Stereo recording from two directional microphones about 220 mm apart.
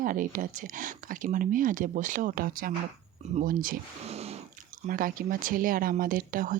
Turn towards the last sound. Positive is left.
turn(degrees=-40)  # may be behind; listen again after turning